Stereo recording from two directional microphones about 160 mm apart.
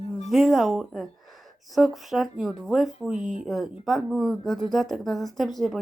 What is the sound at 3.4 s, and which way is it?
Speech, centre (ahead or behind).